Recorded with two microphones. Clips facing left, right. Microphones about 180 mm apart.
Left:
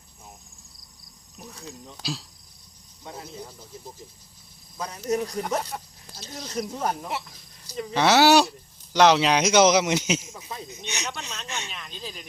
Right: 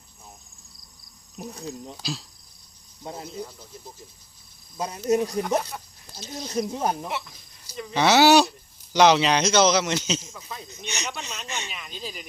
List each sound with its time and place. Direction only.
1.4 s speech: 35° right (ahead or behind)
2.0 s speech: centre (ahead or behind)
4.8 s speech: 25° right (ahead or behind)
6.1 s speech: centre (ahead or behind)
6.7 s speech: 20° right (ahead or behind)
7.9 s a sound: centre (ahead or behind)
9.4 s speech: 15° left (ahead or behind)
10.8 s speech: centre (ahead or behind)